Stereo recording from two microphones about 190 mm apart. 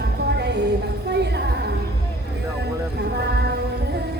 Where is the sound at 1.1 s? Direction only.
65° right (ahead or behind).